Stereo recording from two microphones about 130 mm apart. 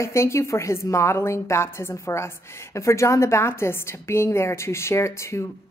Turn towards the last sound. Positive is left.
turn(degrees=20)  # may be behind; listen again after turning